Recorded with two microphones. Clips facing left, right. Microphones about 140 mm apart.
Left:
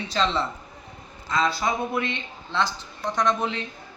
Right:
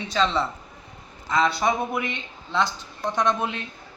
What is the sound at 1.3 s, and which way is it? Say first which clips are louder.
Speech: right 2 dB; 20° right (ahead or behind).